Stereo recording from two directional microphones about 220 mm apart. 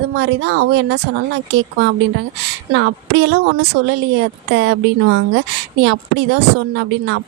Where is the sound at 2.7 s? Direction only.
55° right (ahead or behind).